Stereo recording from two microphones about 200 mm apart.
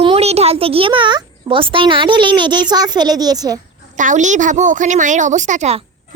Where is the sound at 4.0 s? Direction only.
40° right (ahead or behind).